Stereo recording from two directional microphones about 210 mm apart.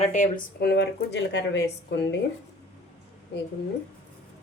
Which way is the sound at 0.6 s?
50° left (ahead or behind).